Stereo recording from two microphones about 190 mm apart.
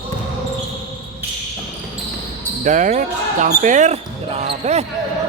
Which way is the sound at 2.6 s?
40° right (ahead or behind).